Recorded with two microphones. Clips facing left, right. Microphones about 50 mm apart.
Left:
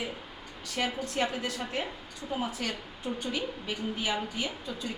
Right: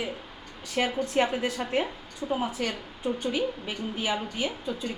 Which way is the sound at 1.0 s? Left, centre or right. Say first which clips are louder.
Right 5 dB; right.